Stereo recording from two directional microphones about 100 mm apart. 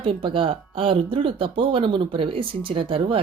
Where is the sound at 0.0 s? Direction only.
60° right (ahead or behind).